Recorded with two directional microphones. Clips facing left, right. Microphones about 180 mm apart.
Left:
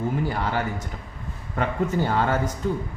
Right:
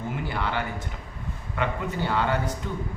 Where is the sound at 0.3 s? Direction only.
40° left (ahead or behind).